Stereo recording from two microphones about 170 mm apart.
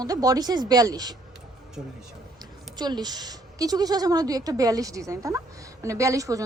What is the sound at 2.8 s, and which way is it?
Speech, 25° right (ahead or behind).